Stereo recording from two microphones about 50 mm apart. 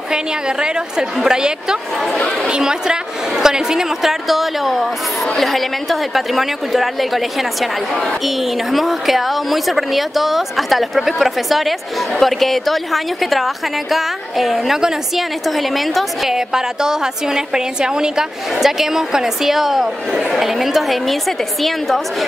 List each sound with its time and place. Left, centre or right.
0.1 s a woman's voice: centre
8.7 s a woman's voice: centre